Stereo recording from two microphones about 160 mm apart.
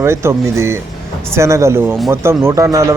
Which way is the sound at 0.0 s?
15° right (ahead or behind).